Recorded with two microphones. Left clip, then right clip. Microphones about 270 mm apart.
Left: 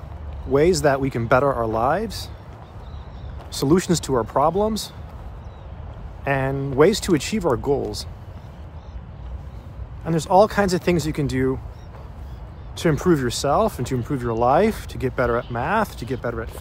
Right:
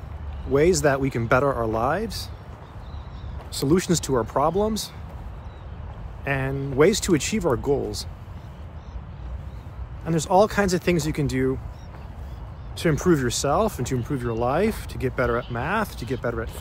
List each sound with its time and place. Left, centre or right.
0.5 s speech: centre
3.5 s speech: centre
6.2 s speech: centre
10.0 s speech: centre
12.7 s speech: centre